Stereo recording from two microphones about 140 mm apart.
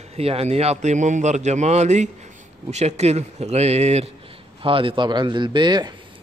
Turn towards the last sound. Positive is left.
turn(degrees=-30)  # may be behind; listen again after turning